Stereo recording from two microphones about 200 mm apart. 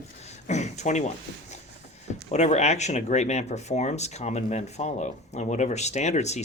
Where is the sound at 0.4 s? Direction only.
35° left (ahead or behind).